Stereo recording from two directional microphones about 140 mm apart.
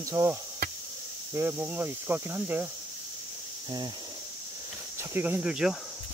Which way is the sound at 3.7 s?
30° right (ahead or behind).